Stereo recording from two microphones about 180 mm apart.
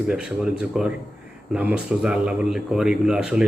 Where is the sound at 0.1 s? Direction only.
5° right (ahead or behind).